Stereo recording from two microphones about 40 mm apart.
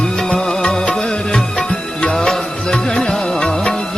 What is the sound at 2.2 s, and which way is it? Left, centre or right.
Music, centre.